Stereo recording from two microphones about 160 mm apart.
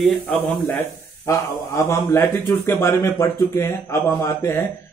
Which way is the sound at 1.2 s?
15° left (ahead or behind).